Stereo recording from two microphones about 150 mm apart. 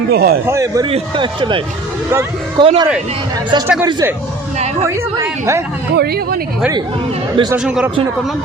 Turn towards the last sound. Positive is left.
turn(degrees=-5)  # may be behind; listen again after turning